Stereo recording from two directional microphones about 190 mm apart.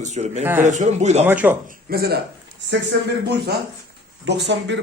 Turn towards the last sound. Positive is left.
turn(degrees=-65)  # may be behind; listen again after turning